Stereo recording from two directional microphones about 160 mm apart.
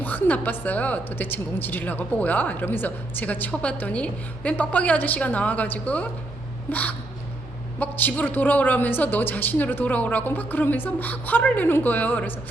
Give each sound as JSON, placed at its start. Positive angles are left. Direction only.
{"t": 0.0, "sound": "a woman's voice", "side_deg": 10}